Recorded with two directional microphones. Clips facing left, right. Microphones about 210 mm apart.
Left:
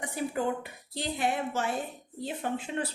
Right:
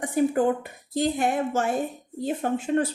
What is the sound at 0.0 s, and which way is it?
Speech, 50° right (ahead or behind).